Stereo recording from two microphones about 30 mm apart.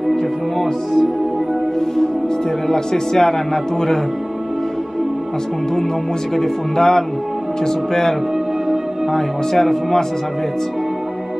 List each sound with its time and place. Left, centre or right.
2.7 s speech: centre
6.3 s speech: centre